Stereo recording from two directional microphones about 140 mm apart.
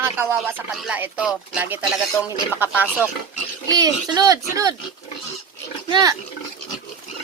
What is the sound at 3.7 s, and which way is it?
A child's voice, 25° right (ahead or behind).